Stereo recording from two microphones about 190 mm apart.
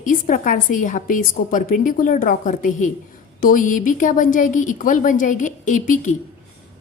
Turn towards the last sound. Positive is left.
turn(degrees=40)  # may be behind; listen again after turning